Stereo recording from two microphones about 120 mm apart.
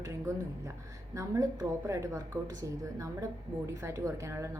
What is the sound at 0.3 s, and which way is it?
A woman's voice, 25° right (ahead or behind).